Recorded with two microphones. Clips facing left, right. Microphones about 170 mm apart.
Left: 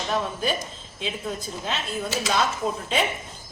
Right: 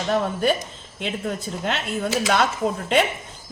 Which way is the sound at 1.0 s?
60° right (ahead or behind).